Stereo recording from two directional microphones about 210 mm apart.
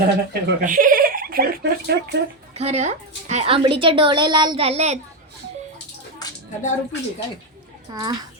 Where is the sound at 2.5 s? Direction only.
30° right (ahead or behind).